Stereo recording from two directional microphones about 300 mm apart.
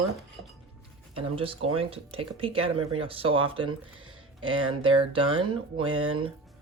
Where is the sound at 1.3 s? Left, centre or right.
Centre.